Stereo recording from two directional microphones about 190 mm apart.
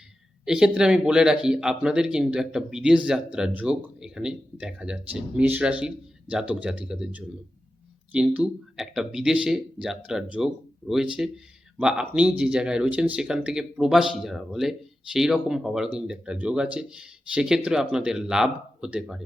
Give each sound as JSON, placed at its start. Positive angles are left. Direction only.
{"t": 0.4, "sound": "speech", "side_deg": -5}